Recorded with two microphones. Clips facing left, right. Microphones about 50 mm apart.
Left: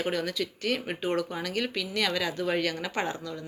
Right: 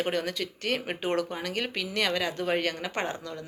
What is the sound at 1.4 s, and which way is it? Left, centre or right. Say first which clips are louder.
Speech: left 1 dB; right.